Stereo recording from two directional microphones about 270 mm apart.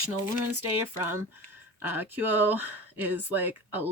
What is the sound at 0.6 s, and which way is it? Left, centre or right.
Speech, centre.